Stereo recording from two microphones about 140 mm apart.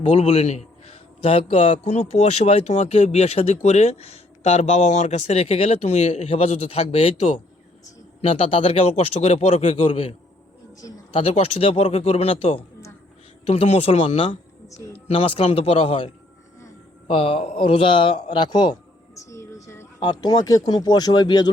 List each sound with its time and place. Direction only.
0.0 s a man's voice: 50° left (ahead or behind)
19.1 s a sound: 20° left (ahead or behind)
20.0 s a man's voice: 30° left (ahead or behind)